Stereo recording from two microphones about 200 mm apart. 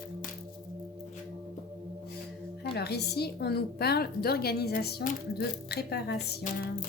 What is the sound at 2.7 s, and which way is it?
A woman's voice, 55° left (ahead or behind).